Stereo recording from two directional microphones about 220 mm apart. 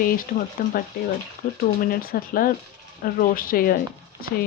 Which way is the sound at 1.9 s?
40° left (ahead or behind).